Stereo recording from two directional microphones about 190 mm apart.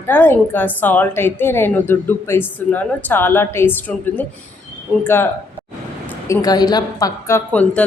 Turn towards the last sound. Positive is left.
turn(degrees=5)  # may be behind; listen again after turning